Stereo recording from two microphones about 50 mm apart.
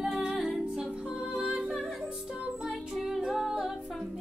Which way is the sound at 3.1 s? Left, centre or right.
Centre.